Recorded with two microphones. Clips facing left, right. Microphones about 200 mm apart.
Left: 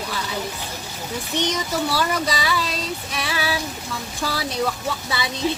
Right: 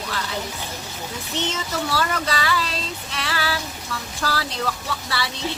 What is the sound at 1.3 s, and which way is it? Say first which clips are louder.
Speech: left 3 dB; 15° left (ahead or behind).